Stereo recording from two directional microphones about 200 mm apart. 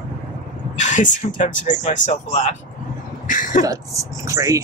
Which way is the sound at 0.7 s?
40° left (ahead or behind).